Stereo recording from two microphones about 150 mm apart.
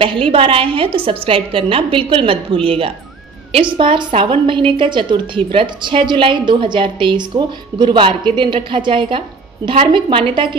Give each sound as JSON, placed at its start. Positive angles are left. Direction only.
{"t": 0.0, "sound": "a woman's voice", "side_deg": -35}